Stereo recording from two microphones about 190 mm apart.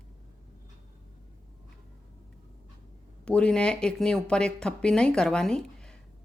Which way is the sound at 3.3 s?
5° left (ahead or behind).